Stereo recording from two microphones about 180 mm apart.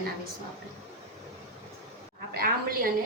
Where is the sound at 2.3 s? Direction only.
50° right (ahead or behind).